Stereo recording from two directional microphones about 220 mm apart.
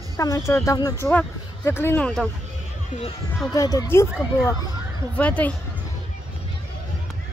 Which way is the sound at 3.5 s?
15° left (ahead or behind).